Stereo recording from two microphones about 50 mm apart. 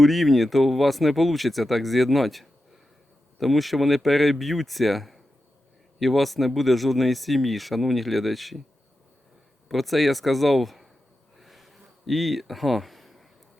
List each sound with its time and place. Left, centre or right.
0.0 s speech: centre
9.6 s speech: centre
11.3 s a sound: centre